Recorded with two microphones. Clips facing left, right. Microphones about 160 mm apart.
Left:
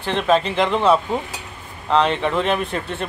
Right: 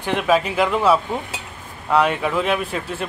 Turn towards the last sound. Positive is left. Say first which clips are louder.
# even
turn(degrees=-5)  # may be behind; listen again after turning